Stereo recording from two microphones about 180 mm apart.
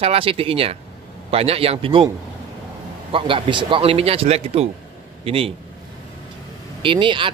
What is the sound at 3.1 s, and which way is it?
A man's voice, 30° right (ahead or behind).